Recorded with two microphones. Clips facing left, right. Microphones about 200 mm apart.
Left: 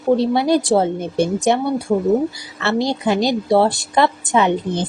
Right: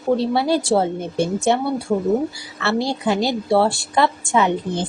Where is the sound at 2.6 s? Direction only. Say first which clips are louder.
Left 2 dB; 20° left (ahead or behind).